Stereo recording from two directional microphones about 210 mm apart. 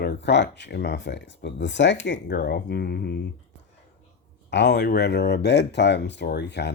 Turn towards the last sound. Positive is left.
turn(degrees=55)  # may be behind; listen again after turning